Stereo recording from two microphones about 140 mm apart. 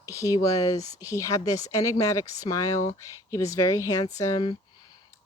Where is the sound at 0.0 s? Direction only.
25° left (ahead or behind).